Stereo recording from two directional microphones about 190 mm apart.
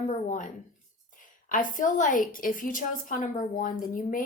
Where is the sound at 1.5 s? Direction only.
45° left (ahead or behind).